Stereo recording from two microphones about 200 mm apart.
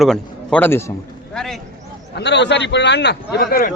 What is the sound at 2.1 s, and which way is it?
A man's voice, 60° left (ahead or behind).